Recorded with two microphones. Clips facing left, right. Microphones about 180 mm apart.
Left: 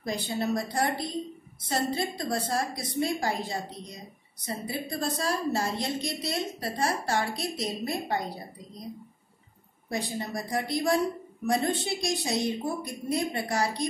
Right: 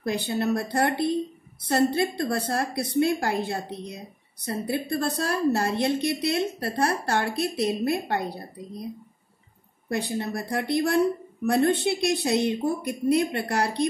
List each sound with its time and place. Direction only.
0.0 s a woman's voice: 60° right (ahead or behind)
9.8 s a woman's voice: 65° right (ahead or behind)